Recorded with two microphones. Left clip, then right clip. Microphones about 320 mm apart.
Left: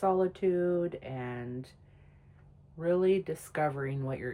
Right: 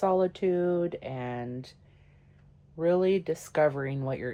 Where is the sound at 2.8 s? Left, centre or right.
Centre.